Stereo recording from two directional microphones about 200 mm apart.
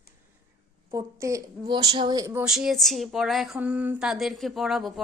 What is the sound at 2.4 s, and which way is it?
Speech, centre (ahead or behind).